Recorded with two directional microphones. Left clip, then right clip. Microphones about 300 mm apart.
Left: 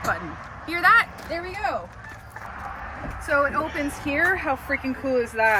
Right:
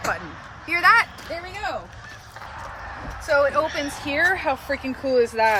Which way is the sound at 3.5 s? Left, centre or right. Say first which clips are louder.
Right 3 dB; right.